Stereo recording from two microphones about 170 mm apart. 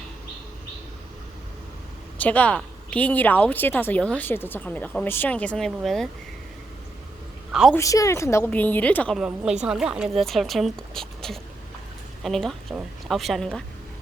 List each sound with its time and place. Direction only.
2.1 s a woman's voice: 10° left (ahead or behind)
7.7 s a woman's voice: 20° left (ahead or behind)
9.1 s a woman's voice: 5° right (ahead or behind)